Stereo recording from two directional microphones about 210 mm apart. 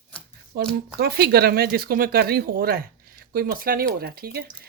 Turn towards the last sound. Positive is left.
turn(degrees=-45)  # may be behind; listen again after turning